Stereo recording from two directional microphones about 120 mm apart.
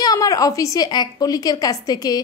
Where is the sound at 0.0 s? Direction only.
30° left (ahead or behind).